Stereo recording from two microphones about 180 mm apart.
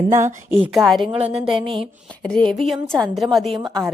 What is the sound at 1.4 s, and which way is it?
Speech, 5° right (ahead or behind).